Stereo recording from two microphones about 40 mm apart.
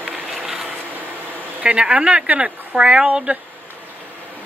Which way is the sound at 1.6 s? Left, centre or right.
Right.